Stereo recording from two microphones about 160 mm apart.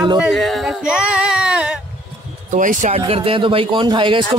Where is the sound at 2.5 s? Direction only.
55° right (ahead or behind).